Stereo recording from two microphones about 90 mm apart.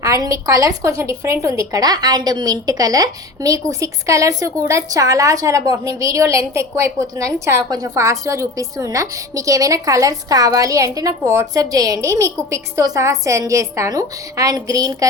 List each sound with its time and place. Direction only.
0.0 s a woman's voice: 35° right (ahead or behind)